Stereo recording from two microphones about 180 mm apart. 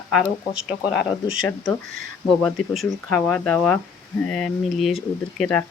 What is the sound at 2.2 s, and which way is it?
Speech, centre (ahead or behind).